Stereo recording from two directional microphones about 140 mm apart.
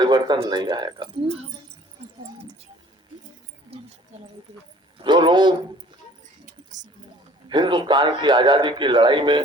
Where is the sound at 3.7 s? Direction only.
45° right (ahead or behind).